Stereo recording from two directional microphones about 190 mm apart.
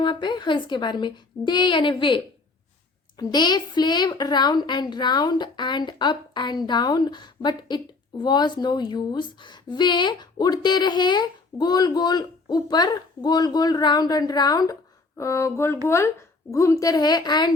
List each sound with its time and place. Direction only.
0.0 s a woman's voice: 25° left (ahead or behind)
15.2 s a sound: 15° left (ahead or behind)
15.9 s a woman's voice: 15° left (ahead or behind)